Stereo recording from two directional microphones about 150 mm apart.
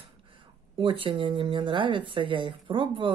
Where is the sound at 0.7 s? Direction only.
35° right (ahead or behind).